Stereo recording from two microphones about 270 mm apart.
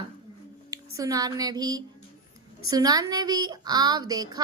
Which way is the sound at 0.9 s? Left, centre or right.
Centre.